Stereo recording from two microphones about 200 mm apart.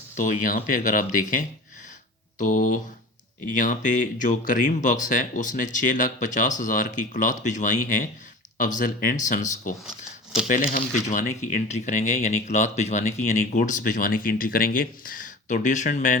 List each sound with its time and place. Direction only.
0.2 s speech: 40° left (ahead or behind)